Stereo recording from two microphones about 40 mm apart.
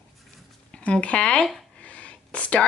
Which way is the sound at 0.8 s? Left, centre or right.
Left.